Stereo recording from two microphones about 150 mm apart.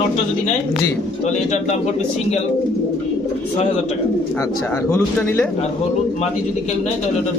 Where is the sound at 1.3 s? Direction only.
55° left (ahead or behind).